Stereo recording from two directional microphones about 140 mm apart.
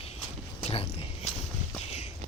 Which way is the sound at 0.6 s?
45° left (ahead or behind).